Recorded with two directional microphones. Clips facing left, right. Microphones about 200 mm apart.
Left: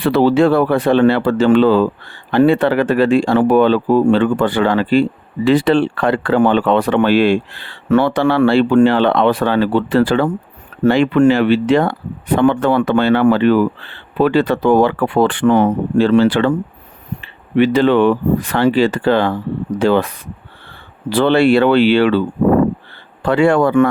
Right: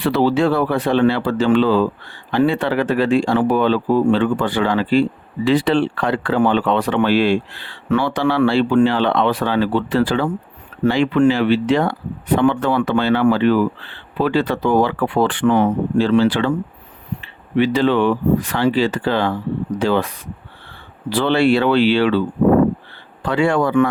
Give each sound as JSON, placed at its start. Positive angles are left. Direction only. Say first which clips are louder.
{"t": 0.0, "sound": "speech", "louder": "left 4 dB", "side_deg": 55}
{"t": 23.2, "sound": "speech", "louder": "left 4 dB", "side_deg": 55}